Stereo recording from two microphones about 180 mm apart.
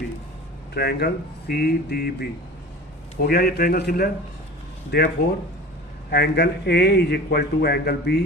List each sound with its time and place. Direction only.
0.7 s a man's voice: 60° left (ahead or behind)
3.2 s a man's voice: 55° left (ahead or behind)